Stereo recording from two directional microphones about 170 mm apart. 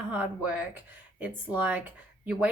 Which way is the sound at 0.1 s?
10° right (ahead or behind).